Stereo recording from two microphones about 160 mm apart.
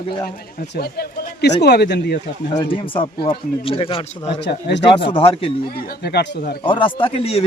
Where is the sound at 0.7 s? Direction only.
85° left.